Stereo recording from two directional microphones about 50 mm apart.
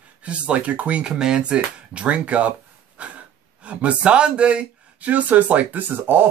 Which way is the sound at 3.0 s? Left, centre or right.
Right.